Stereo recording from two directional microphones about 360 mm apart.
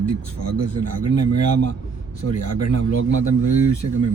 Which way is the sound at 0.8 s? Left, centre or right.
Left.